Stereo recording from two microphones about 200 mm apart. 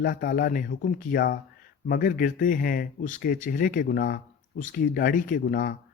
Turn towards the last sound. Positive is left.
turn(degrees=45)  # may be behind; listen again after turning